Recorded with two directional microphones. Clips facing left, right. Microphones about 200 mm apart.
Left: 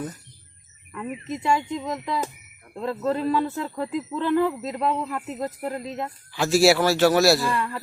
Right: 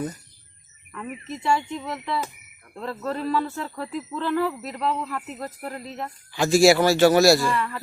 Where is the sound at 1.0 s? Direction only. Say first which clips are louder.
Left 1 dB; 15° left (ahead or behind).